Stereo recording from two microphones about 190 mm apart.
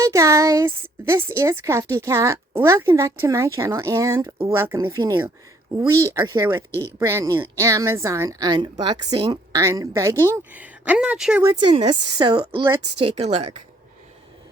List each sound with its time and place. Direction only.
0.0 s a woman's voice: 15° right (ahead or behind)
11.4 s a woman's voice: 25° right (ahead or behind)
13.0 s speech: 30° right (ahead or behind)